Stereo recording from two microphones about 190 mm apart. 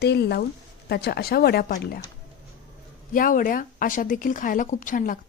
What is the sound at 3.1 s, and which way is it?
Speech, 45° left (ahead or behind).